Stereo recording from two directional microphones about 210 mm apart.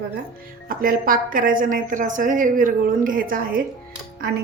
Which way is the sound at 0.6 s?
40° right (ahead or behind).